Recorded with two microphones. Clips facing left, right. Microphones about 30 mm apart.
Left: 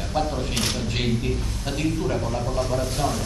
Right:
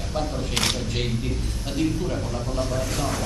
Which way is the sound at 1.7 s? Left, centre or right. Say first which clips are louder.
Left 1 dB; centre.